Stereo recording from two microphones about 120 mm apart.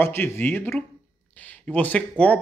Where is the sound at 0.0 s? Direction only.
20° left (ahead or behind).